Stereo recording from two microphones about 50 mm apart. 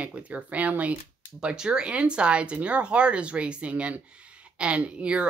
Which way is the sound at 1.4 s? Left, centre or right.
Centre.